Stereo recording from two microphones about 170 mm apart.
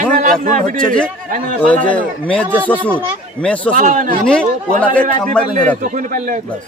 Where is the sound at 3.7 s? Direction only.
50° right (ahead or behind).